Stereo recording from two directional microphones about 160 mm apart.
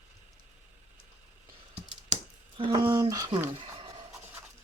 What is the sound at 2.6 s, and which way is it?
Speech, 30° right (ahead or behind).